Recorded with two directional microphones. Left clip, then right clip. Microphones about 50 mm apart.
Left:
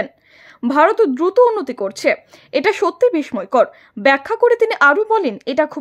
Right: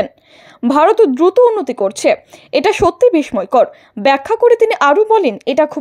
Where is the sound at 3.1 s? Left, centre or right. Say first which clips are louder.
Right 5 dB; right.